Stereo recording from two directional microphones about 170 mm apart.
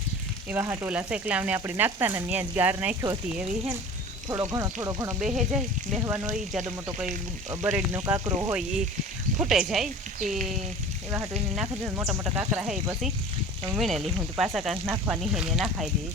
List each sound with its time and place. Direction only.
0.5 s speech: 15° right (ahead or behind)
4.3 s sizzle: 20° right (ahead or behind)
5.0 s speech: 5° right (ahead or behind)
7.6 s speech: 15° right (ahead or behind)
9.4 s speech: 5° right (ahead or behind)
10.2 s speech: 50° right (ahead or behind)
11.5 s speech: 5° right (ahead or behind)
14.8 s speech: 15° right (ahead or behind)